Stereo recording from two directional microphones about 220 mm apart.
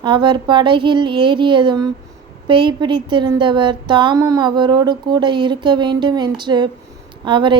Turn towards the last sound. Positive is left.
turn(degrees=-20)  # may be behind; listen again after turning